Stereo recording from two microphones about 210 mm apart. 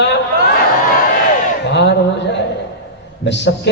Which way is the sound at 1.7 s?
55° left (ahead or behind).